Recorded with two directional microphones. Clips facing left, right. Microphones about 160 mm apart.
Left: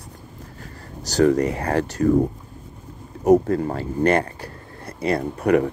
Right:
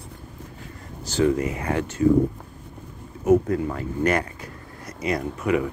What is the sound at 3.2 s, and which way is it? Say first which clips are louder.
Speech: left 3 dB; 40° left (ahead or behind).